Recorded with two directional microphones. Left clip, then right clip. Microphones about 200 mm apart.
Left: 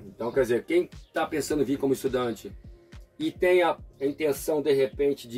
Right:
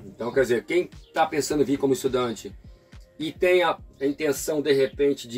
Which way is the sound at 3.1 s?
15° left (ahead or behind).